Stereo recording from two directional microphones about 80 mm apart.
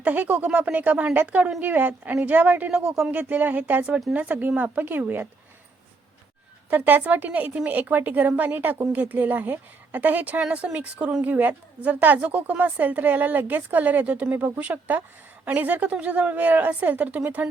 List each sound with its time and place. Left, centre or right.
0.0 s a woman's voice: centre
6.7 s a woman's voice: right